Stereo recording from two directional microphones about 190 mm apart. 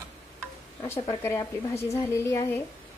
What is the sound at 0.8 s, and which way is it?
A woman's voice, 15° left (ahead or behind).